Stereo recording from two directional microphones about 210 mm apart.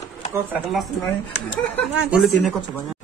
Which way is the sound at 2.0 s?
5° right (ahead or behind).